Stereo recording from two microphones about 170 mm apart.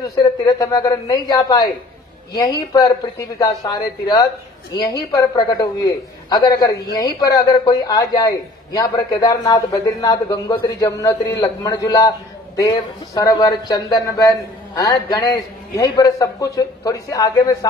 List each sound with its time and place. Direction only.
0.0 s a man's voice: 20° left (ahead or behind)
2.7 s a man's voice: 20° left (ahead or behind)